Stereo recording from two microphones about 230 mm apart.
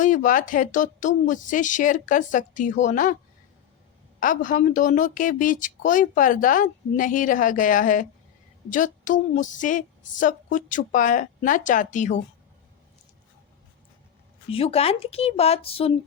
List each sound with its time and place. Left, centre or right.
0.0 s speech: left
4.2 s speech: left
14.5 s speech: left